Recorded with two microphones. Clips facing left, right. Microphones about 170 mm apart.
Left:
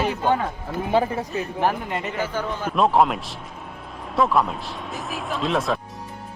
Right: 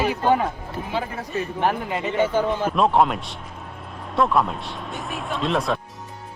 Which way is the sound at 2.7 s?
Centre (ahead or behind).